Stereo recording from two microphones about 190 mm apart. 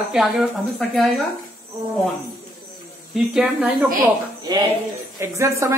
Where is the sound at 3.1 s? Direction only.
5° right (ahead or behind).